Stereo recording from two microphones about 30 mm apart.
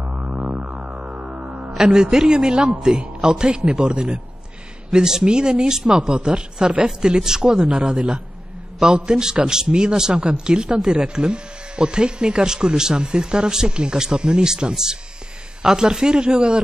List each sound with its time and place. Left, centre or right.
0.3 s music: right
0.7 s music: right
1.2 s music: right
1.7 s a man's voice: centre
3.4 s speech: right
4.9 s a man's voice: right
14.5 s speech: centre